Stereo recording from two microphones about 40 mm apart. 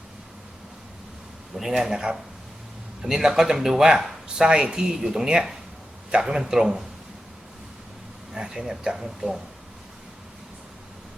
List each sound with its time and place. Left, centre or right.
1.6 s speech: centre
3.0 s speech: centre
8.3 s speech: centre